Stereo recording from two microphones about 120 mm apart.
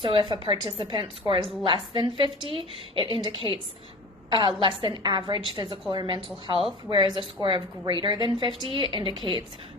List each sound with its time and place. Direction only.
0.3 s a woman's voice: 45° right (ahead or behind)